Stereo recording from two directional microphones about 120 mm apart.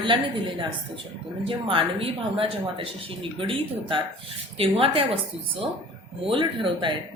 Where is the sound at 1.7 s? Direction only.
50° right (ahead or behind).